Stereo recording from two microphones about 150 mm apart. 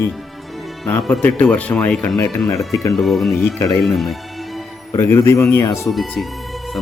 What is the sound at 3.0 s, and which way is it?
Speech, centre (ahead or behind).